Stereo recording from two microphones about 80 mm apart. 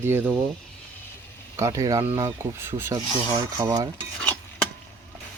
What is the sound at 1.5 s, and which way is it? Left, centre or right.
Speech, right.